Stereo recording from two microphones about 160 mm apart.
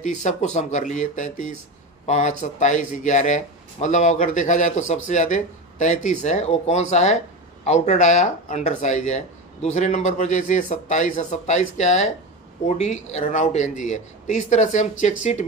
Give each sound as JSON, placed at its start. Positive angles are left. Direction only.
{"t": 0.0, "sound": "speech", "side_deg": 50}